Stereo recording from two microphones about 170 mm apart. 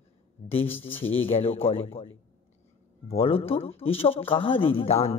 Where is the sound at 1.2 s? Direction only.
35° left (ahead or behind).